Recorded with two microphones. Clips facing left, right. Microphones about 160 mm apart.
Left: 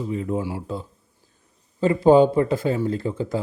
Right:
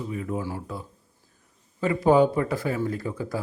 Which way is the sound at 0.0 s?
25° left (ahead or behind).